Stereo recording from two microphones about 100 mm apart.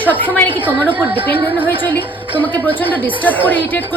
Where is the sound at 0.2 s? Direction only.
15° left (ahead or behind).